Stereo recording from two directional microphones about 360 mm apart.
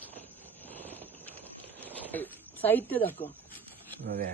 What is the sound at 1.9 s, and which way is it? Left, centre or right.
Speech, centre.